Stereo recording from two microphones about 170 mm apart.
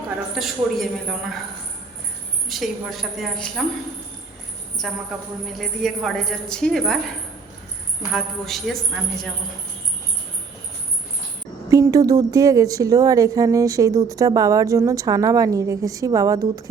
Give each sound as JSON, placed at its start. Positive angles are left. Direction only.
{"t": 0.3, "sound": "a woman's voice", "side_deg": 0}
{"t": 2.5, "sound": "a woman's voice", "side_deg": 0}
{"t": 4.8, "sound": "a woman's voice", "side_deg": 0}
{"t": 8.1, "sound": "a woman's voice", "side_deg": 0}
{"t": 11.7, "sound": "a woman's voice", "side_deg": -20}